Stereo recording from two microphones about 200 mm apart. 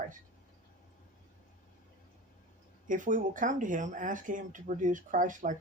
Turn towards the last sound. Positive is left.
turn(degrees=-40)  # may be behind; listen again after turning